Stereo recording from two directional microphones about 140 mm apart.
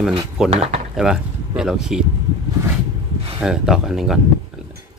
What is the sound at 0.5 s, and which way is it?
Speech, 50° right (ahead or behind).